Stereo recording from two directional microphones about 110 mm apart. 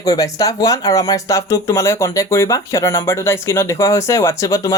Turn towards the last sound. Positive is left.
turn(degrees=30)  # may be behind; listen again after turning